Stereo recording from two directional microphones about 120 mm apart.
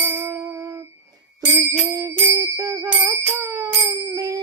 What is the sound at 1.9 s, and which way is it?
Bicycle bell, 25° right (ahead or behind).